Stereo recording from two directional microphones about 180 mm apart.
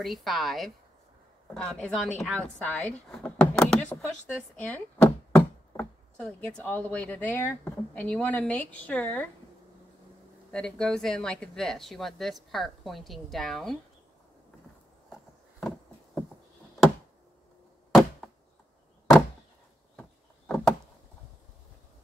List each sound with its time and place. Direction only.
0.0 s speech: centre (ahead or behind)
4.6 s knock: 10° left (ahead or behind)
6.4 s speech: 10° left (ahead or behind)
10.5 s speech: 5° left (ahead or behind)
20.0 s a sound: 5° left (ahead or behind)